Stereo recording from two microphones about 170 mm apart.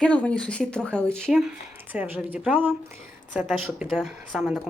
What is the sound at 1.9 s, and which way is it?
Speech, 10° right (ahead or behind).